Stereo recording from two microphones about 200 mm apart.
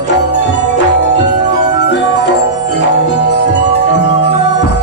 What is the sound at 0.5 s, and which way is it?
Music, 65° left (ahead or behind).